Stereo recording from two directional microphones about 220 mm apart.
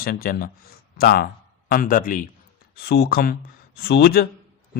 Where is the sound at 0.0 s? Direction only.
40° left (ahead or behind).